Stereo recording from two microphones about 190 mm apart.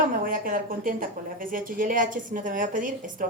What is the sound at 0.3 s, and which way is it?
Speech, 45° right (ahead or behind).